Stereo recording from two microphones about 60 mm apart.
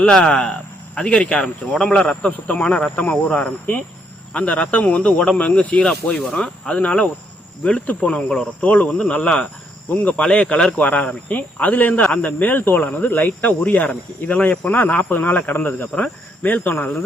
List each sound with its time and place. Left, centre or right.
0.0 s speech: centre; by 17.0 s left